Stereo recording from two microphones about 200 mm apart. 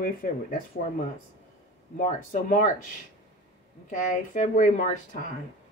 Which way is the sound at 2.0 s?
40° left (ahead or behind).